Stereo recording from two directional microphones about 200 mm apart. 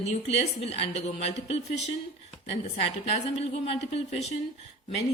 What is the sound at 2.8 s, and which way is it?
A woman's voice, 30° left (ahead or behind).